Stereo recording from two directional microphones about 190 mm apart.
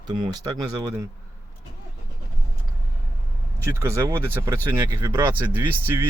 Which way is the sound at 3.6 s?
15° right (ahead or behind).